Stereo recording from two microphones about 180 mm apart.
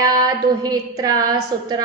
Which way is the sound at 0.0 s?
20° right (ahead or behind).